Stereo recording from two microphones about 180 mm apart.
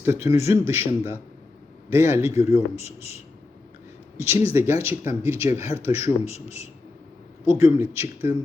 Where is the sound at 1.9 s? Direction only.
15° right (ahead or behind).